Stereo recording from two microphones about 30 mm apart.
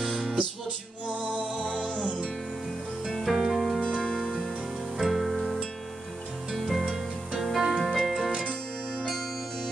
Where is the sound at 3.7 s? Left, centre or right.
Left.